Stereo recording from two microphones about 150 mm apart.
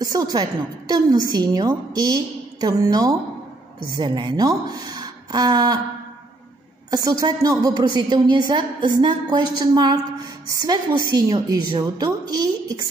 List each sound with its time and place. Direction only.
0.0 s a woman's voice: 25° right (ahead or behind)
6.9 s a woman's voice: 25° right (ahead or behind)